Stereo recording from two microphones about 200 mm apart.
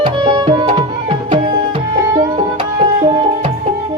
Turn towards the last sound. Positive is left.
turn(degrees=-25)  # may be behind; listen again after turning